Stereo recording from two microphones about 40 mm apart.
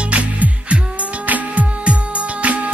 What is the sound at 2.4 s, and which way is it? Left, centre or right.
Music, right.